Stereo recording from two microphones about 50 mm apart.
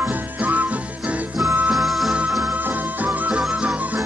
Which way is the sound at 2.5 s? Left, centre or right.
Right.